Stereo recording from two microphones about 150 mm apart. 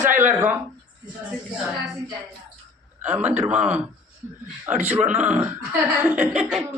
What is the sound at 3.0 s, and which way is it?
Speech, 10° right (ahead or behind).